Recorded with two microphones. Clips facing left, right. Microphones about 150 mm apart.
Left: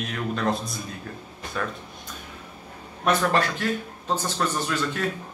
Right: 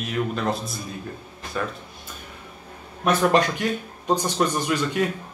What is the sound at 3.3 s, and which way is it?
A man's voice, 15° right (ahead or behind).